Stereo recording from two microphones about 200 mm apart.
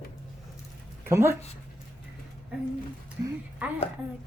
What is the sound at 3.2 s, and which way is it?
Speech, 10° right (ahead or behind).